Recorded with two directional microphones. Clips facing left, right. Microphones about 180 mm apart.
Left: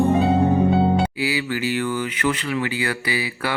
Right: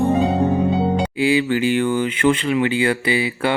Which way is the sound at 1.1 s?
25° right (ahead or behind).